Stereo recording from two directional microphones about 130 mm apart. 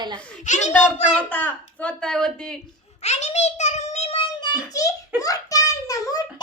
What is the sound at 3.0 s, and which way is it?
A child's voice, 60° left (ahead or behind).